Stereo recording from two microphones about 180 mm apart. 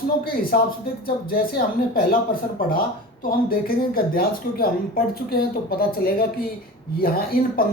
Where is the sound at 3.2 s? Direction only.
55° left (ahead or behind).